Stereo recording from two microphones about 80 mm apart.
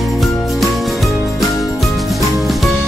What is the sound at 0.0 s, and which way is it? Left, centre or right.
Music, centre.